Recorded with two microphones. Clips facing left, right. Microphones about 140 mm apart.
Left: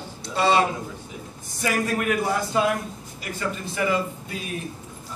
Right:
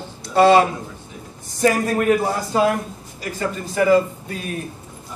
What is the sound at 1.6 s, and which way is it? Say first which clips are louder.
A man's voice: right 7 dB; 35° right (ahead or behind).